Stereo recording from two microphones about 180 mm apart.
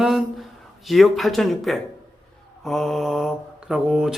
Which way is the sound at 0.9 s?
Centre (ahead or behind).